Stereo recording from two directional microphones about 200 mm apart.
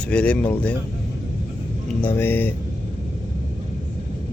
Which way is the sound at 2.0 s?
10° left (ahead or behind).